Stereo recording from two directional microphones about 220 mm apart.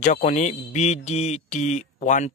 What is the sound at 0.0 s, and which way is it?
Speech, 35° left (ahead or behind).